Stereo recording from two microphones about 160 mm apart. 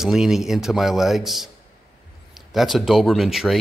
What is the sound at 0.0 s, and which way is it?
Speech, 5° right (ahead or behind).